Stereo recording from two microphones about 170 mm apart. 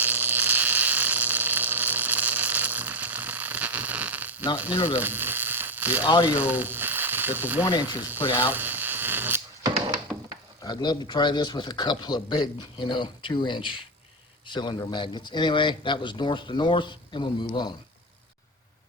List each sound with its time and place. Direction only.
0.0 s a sound: 10° right (ahead or behind)
4.5 s speech: 10° right (ahead or behind)
4.9 s frying: 10° right (ahead or behind)
6.2 s speech: 10° right (ahead or behind)
7.6 s a man's voice: 25° left (ahead or behind)
8.4 s a sound: 10° right (ahead or behind)
10.6 s a man's voice: 25° left (ahead or behind)